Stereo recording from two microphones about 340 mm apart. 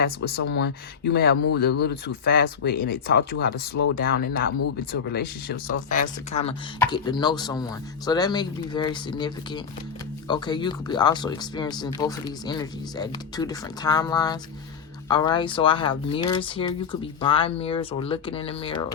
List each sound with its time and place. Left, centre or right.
0.0 s speech: left